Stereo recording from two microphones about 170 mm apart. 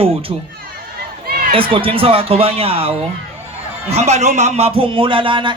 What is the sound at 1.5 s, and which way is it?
Speech, 30° right (ahead or behind).